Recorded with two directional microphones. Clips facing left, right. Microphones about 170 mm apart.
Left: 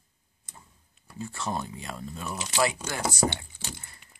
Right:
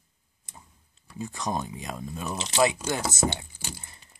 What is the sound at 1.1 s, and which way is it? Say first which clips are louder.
Speech: right 2 dB; 15° right (ahead or behind).